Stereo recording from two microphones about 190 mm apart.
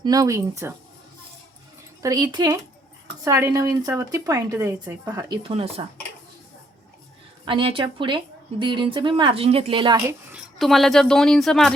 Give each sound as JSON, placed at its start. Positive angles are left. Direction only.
{"t": 0.0, "sound": "speech", "side_deg": -20}
{"t": 2.0, "sound": "a woman's voice", "side_deg": -20}
{"t": 5.4, "sound": "a woman's voice", "side_deg": -30}
{"t": 7.4, "sound": "a woman's voice", "side_deg": -25}
{"t": 10.1, "sound": "a woman's voice", "side_deg": -5}